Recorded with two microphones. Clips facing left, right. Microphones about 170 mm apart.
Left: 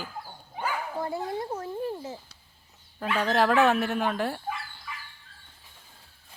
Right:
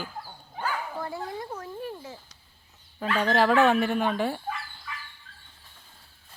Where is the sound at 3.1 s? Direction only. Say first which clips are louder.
Right 1 dB; centre (ahead or behind).